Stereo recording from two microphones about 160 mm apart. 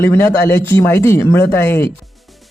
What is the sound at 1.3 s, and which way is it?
Speech, 90° left.